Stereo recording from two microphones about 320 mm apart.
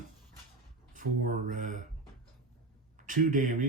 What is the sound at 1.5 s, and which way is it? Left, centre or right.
Speech, right.